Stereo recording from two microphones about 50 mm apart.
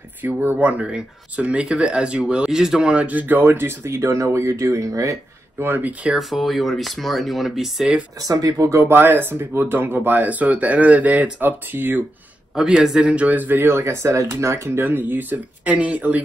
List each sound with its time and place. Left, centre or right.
0.2 s speech: right; by 2.9 s centre
2.9 s speech: right
3.8 s speech: right
5.6 s speech: right
6.1 s speech: centre
8.8 s speech: right
11.4 s speech: right
12.5 s a man's voice: centre
13.0 s speech: right
13.7 s speech: right